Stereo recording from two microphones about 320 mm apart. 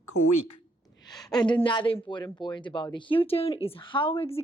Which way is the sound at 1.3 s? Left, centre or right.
Centre.